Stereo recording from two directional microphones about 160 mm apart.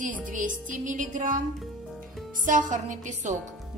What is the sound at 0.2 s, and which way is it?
Music, 55° right (ahead or behind).